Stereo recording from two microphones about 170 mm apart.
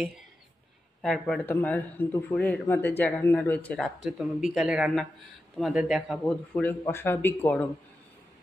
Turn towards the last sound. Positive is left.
turn(degrees=10)  # may be behind; listen again after turning